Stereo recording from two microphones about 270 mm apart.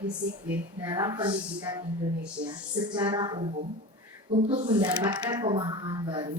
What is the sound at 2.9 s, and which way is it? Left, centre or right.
Speech, centre.